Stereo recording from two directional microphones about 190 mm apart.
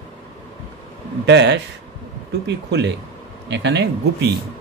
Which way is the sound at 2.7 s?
65° right (ahead or behind).